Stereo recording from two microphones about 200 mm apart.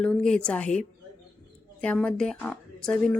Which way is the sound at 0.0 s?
5° left (ahead or behind).